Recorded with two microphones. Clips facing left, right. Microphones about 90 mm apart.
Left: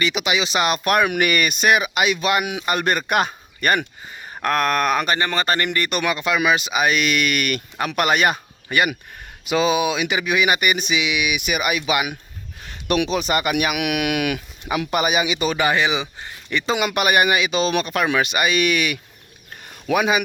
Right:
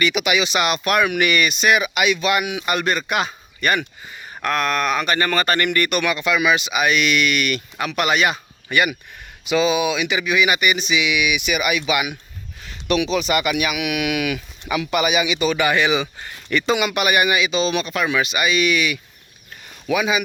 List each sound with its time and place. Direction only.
0.0 s speech: 30° left (ahead or behind); by 5.1 s 45° left (ahead or behind)
5.1 s speech: 25° left (ahead or behind); by 11.0 s 45° left (ahead or behind)
11.0 s speech: 35° left (ahead or behind)
16.7 s speech: 40° left (ahead or behind)